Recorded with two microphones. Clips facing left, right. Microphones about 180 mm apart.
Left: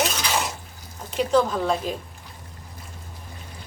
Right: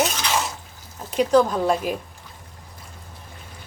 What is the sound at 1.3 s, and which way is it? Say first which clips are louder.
Speech: right 3 dB; 10° right (ahead or behind).